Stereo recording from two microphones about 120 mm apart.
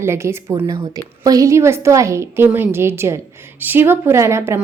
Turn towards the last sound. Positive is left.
turn(degrees=-20)  # may be behind; listen again after turning